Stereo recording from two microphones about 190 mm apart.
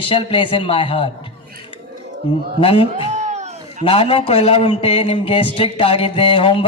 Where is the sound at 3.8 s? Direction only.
30° left (ahead or behind).